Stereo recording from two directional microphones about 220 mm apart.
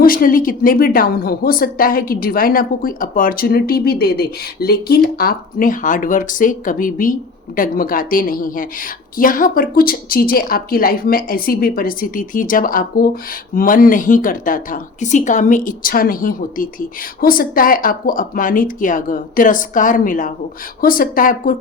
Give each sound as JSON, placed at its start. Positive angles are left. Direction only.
{"t": 0.0, "sound": "a woman's voice", "side_deg": 40}